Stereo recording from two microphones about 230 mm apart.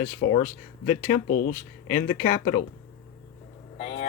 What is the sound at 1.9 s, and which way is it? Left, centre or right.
Speech, left.